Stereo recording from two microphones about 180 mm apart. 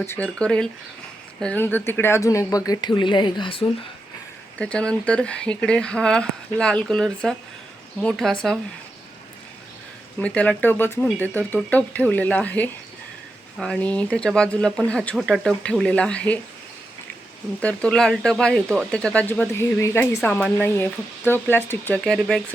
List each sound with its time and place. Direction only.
0.0 s speech: 10° left (ahead or behind); by 3.7 s 30° left (ahead or behind)
4.5 s speech: 5° left (ahead or behind)
10.2 s speech: 5° left (ahead or behind)
17.6 s speech: 5° left (ahead or behind)